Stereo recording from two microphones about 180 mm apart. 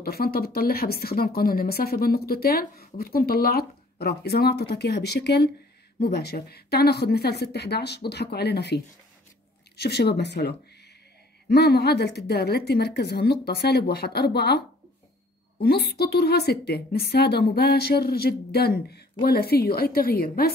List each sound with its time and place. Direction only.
0.0 s speech: 55° left (ahead or behind)
15.6 s speech: 60° left (ahead or behind)